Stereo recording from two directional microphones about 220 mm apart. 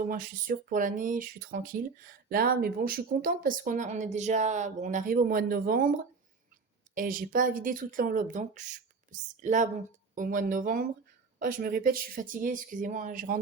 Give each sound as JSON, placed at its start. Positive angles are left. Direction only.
{"t": 0.0, "sound": "speech", "side_deg": -40}